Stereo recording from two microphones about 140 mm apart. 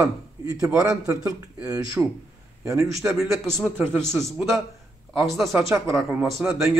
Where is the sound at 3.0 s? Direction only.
Centre (ahead or behind).